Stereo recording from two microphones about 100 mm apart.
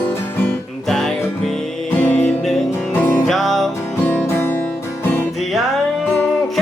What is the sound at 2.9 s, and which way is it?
Music, 20° left (ahead or behind).